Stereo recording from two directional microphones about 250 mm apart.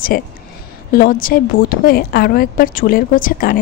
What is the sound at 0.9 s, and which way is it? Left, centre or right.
A woman's voice, left.